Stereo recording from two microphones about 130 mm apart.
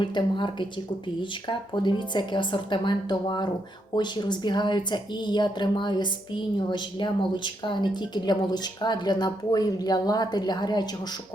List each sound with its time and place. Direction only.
0.0 s speech: 35° left (ahead or behind)